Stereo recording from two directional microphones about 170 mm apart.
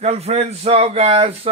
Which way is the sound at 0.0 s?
40° right (ahead or behind).